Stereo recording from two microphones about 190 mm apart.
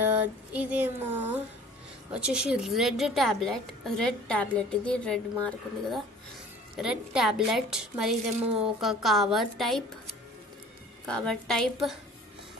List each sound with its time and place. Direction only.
0.0 s a sound: 10° right (ahead or behind)
2.1 s a woman's voice: 5° right (ahead or behind)
11.1 s a woman's voice: 5° left (ahead or behind)